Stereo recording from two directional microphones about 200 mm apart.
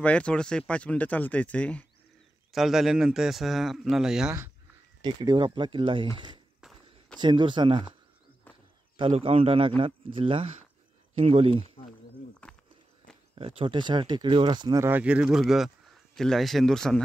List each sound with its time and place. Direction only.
0.0 s speech: 5° left (ahead or behind)
5.0 s speech: 20° right (ahead or behind)
8.9 s speech: 30° right (ahead or behind)
12.4 s snake: 5° left (ahead or behind)
13.3 s speech: 25° right (ahead or behind); by 17.0 s 5° left (ahead or behind)